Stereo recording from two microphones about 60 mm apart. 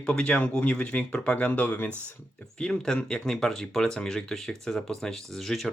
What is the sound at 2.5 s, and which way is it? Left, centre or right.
Speech, centre.